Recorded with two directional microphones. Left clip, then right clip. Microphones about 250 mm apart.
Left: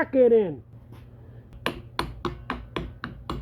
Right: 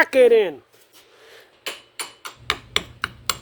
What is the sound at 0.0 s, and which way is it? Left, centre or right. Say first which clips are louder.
Speech: right 5 dB; right.